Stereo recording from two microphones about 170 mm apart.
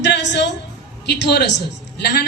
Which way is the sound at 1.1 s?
80° left.